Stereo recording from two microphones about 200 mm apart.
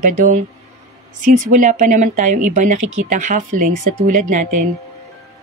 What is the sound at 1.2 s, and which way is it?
Speech, 40° right (ahead or behind).